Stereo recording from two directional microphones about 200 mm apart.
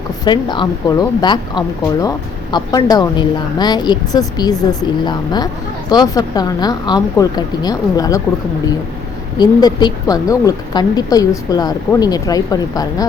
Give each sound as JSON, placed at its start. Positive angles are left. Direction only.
{"t": 0.3, "sound": "speech", "side_deg": 25}
{"t": 9.4, "sound": "speech", "side_deg": 20}